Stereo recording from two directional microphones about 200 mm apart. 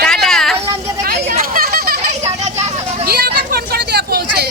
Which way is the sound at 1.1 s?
55° right (ahead or behind).